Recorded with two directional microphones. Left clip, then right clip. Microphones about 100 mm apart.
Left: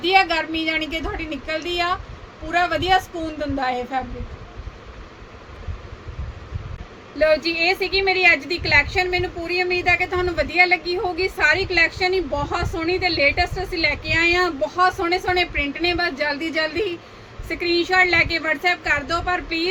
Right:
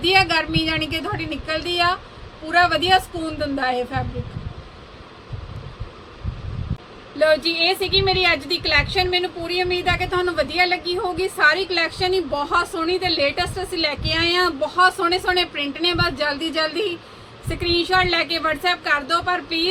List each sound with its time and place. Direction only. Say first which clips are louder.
0.1 s a woman's voice: even; 15° right (ahead or behind)
7.2 s a woman's voice: right 1 dB; centre (ahead or behind)